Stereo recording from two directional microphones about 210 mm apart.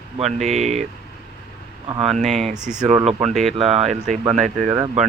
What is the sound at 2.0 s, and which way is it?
Speech, 30° right (ahead or behind).